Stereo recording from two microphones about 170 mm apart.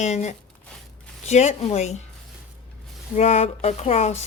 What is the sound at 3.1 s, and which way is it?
Speech, 40° left (ahead or behind).